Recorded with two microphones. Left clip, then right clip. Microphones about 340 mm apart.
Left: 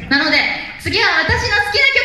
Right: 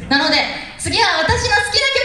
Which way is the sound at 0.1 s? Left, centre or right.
Right.